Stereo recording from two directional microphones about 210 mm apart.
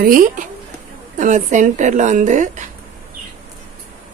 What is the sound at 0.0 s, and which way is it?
A woman's voice, 40° right (ahead or behind).